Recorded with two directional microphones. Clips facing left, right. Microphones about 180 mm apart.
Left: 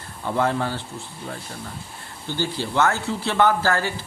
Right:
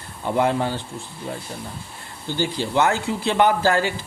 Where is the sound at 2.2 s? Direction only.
15° right (ahead or behind).